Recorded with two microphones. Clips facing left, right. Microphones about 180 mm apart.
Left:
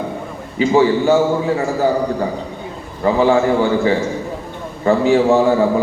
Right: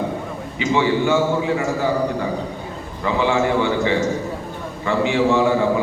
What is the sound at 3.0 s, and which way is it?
A man's voice, 40° left (ahead or behind).